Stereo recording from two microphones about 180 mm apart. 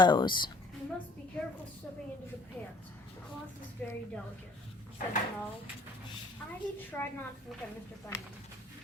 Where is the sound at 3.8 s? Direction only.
10° left (ahead or behind).